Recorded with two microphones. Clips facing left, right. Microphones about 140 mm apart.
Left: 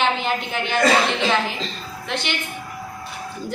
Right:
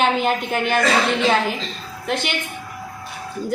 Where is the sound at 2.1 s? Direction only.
45° right (ahead or behind).